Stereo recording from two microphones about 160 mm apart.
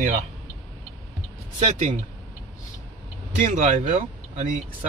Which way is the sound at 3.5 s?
50° right (ahead or behind).